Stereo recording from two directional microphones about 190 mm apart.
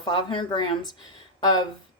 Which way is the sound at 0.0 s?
20° left (ahead or behind).